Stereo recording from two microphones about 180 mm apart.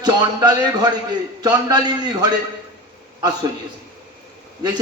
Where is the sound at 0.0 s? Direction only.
20° right (ahead or behind).